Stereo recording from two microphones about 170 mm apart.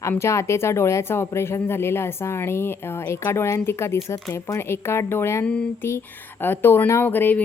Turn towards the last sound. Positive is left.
turn(degrees=10)  # may be behind; listen again after turning